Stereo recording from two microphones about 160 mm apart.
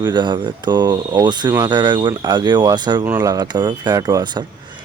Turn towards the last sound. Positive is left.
turn(degrees=-25)  # may be behind; listen again after turning